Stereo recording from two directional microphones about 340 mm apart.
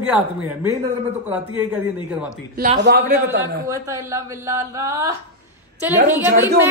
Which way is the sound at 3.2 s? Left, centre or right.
Centre.